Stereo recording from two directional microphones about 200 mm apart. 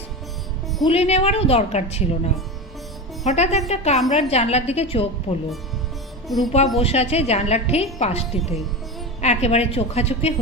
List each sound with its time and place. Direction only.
0.9 s a woman's voice: 30° left (ahead or behind)
6.2 s speech: centre (ahead or behind)
6.7 s a woman's voice: 30° left (ahead or behind)